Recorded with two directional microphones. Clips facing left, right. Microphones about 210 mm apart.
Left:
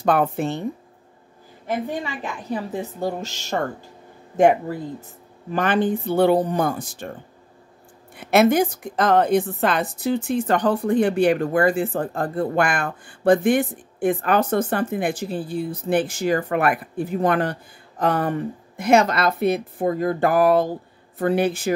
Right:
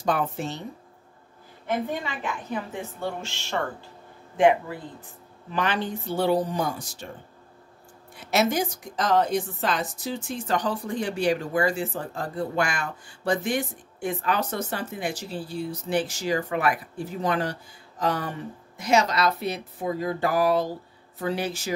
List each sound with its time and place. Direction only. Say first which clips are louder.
0.0 s a woman's voice: left 6 dB; 60° left (ahead or behind)
2.5 s speech: left 5 dB; 35° left (ahead or behind); by 7.1 s 55° left (ahead or behind)
8.2 s a woman's voice: left 7 dB; 55° left (ahead or behind)